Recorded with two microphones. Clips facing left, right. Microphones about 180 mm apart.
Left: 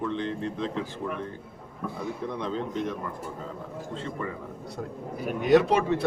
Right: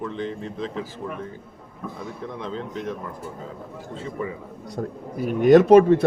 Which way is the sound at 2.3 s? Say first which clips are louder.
Right 1 dB; centre (ahead or behind).